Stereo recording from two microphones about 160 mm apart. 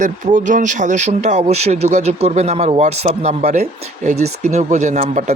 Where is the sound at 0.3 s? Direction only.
55° right (ahead or behind).